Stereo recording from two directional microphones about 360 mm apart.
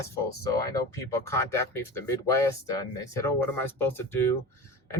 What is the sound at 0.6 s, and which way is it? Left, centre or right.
Speech, centre.